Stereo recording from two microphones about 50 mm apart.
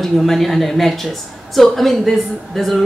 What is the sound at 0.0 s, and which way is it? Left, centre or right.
Speech, centre.